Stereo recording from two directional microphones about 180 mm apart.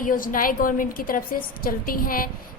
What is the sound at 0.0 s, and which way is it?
A woman's voice, 50° left (ahead or behind).